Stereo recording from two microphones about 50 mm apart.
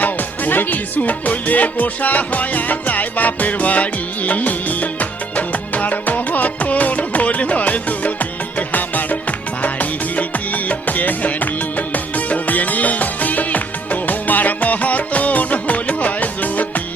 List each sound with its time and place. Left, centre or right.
0.0 s music: left